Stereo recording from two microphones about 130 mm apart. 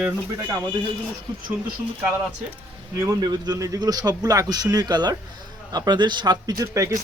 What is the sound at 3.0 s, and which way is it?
Speech, 30° right (ahead or behind).